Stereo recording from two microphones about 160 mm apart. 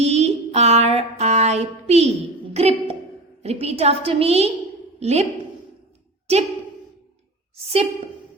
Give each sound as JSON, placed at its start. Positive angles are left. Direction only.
{"t": 0.0, "sound": "child singing", "side_deg": -40}
{"t": 3.4, "sound": "a woman's voice", "side_deg": -40}
{"t": 7.5, "sound": "a woman's voice", "side_deg": -40}